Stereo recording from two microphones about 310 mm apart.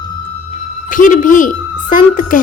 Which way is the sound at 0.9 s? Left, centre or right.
Left.